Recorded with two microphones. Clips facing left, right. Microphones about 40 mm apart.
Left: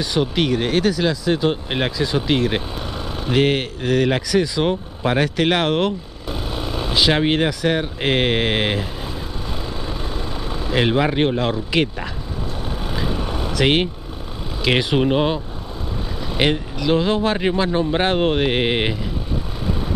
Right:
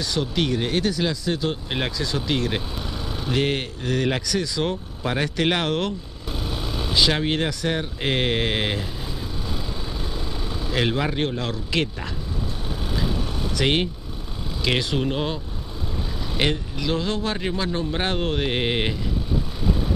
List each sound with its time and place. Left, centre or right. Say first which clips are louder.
0.0 s speech: left 4 dB; centre
1.3 s speech: left 6 dB; left
5.2 s vehicle: left 3 dB; centre
7.1 s speech: left 5 dB; left
10.1 s speech: left 4 dB; centre
12.9 s vehicle: left 1 dB; centre
13.6 s speech: left 4 dB; left